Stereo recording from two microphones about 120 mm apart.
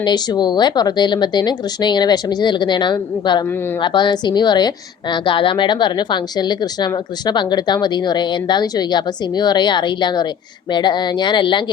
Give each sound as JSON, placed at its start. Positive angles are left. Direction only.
{"t": 0.0, "sound": "a woman's voice", "side_deg": 35}